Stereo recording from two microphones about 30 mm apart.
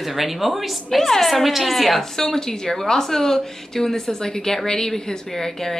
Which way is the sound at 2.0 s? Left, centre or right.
Centre.